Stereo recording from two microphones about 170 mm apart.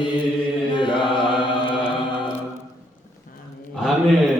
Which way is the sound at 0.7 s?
30° left (ahead or behind).